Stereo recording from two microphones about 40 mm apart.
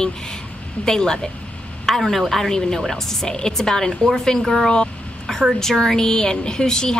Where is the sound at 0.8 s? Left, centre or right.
Centre.